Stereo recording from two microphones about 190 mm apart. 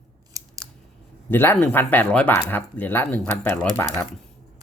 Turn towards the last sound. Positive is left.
turn(degrees=10)  # may be behind; listen again after turning